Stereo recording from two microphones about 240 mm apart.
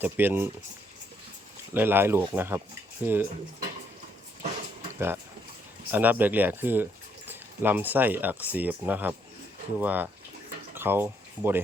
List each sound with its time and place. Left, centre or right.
0.0 s speech: centre
1.7 s speech: centre
4.9 s speech: centre